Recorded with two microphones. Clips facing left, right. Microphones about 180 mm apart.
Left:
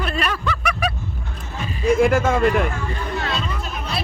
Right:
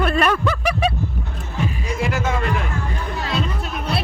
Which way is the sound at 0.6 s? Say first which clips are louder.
Right 3 dB; 30° right (ahead or behind).